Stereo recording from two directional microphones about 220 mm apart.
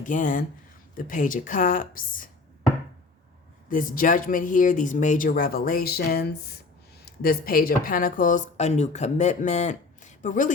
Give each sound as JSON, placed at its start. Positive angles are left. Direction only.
{"t": 0.0, "sound": "speech", "side_deg": 35}
{"t": 3.7, "sound": "speech", "side_deg": 40}